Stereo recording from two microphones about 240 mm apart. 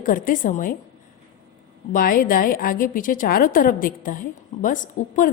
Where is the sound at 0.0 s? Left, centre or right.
Left.